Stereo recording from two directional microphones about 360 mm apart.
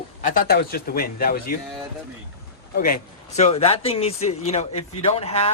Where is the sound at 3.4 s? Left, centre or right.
Centre.